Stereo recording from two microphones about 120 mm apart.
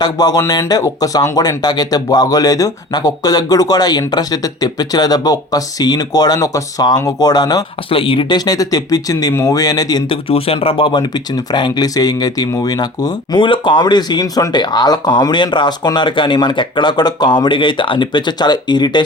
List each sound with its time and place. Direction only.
0.0 s speech: 35° left (ahead or behind)
7.9 s speech: 50° left (ahead or behind)
8.4 s speech: 30° left (ahead or behind)
10.2 s speech: 55° left (ahead or behind); by 19.0 s 35° left (ahead or behind)